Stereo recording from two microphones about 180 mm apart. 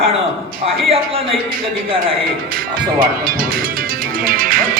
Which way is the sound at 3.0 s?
55° right (ahead or behind).